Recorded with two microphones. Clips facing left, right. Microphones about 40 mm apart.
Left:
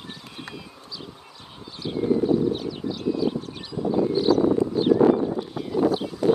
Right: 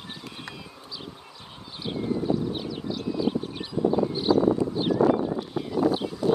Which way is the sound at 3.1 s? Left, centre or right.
Centre.